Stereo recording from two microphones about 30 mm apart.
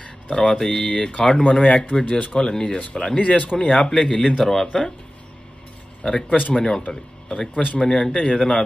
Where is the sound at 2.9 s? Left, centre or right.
Left.